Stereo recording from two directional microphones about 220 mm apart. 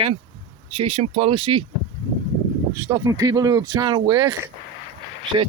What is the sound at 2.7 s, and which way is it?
A man's voice, 15° right (ahead or behind).